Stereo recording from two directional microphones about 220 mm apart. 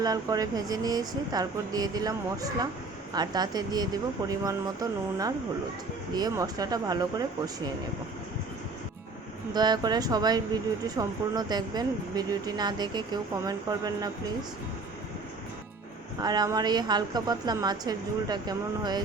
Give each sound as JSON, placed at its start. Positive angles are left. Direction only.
{"t": 0.0, "sound": "speech", "side_deg": -15}
{"t": 9.5, "sound": "speech", "side_deg": -20}
{"t": 16.2, "sound": "speech", "side_deg": -20}